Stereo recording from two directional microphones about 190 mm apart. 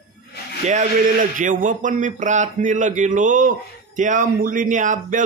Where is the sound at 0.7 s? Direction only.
40° right (ahead or behind).